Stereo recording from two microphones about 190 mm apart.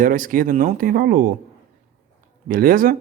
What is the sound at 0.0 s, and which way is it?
A man's voice, 45° right (ahead or behind).